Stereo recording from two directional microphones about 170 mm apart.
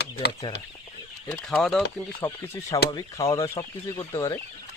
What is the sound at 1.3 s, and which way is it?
Speech, 5° left (ahead or behind).